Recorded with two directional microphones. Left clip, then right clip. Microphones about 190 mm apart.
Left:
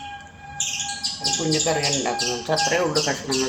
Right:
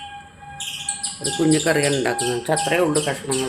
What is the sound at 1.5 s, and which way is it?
Speech, 45° right (ahead or behind).